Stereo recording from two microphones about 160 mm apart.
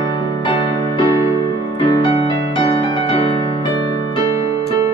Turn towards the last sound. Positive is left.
turn(degrees=30)  # may be behind; listen again after turning